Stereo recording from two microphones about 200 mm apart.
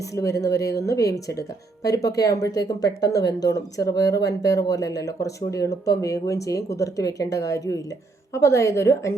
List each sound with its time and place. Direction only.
0.2 s speech: 15° left (ahead or behind)